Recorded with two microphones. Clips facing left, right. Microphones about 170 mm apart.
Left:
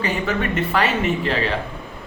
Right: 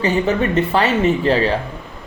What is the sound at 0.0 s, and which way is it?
Speech, 30° right (ahead or behind).